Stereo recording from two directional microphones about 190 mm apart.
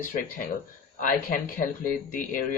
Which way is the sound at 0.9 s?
45° left (ahead or behind).